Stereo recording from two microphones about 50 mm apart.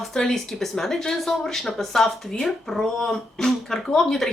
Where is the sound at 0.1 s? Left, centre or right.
Centre.